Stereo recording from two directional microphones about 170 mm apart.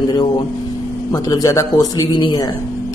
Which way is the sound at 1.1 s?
20° left (ahead or behind).